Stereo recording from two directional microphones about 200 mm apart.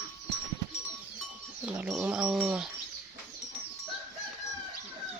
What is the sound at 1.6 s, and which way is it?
Speech, 5° right (ahead or behind).